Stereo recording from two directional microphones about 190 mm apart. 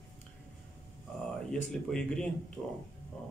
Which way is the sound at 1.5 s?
5° left (ahead or behind).